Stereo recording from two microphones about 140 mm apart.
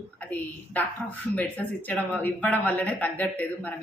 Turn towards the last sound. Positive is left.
turn(degrees=10)  # may be behind; listen again after turning